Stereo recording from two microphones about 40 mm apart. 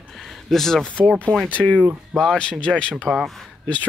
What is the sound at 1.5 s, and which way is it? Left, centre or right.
Speech, left.